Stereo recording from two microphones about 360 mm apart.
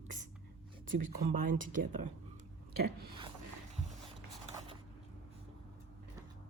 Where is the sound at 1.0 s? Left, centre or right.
Right.